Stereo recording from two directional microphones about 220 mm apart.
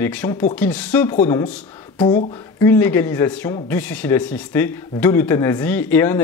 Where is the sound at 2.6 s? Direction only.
10° left (ahead or behind).